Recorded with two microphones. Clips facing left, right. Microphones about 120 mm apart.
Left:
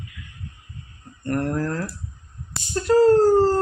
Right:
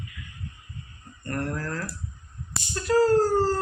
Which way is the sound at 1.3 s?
25° left (ahead or behind).